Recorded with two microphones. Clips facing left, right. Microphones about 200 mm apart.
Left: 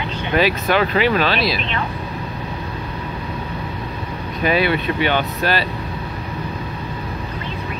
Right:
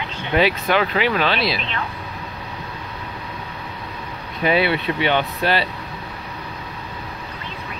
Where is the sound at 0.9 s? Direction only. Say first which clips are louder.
Left 3 dB; 15° right (ahead or behind).